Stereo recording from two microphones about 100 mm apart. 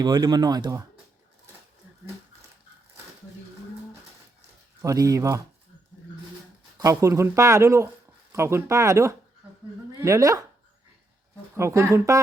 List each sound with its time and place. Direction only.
0.0 s speech: 45° right (ahead or behind)
4.8 s speech: 35° right (ahead or behind)
6.8 s speech: 30° right (ahead or behind)
11.5 s speech: 30° right (ahead or behind)